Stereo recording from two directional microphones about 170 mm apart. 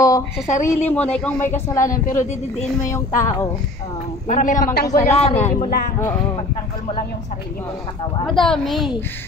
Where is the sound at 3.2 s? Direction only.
15° left (ahead or behind).